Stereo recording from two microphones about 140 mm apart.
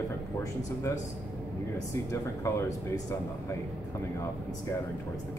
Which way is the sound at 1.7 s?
20° left (ahead or behind).